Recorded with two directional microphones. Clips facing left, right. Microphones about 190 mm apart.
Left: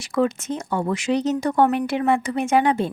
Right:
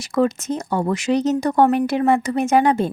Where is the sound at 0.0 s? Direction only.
40° right (ahead or behind).